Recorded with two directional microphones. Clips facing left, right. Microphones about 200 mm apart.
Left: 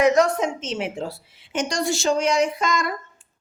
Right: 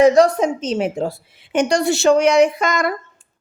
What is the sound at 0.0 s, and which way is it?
A woman's voice, 30° right (ahead or behind).